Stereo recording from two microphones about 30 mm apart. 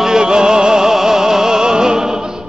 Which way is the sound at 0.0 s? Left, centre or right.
Right.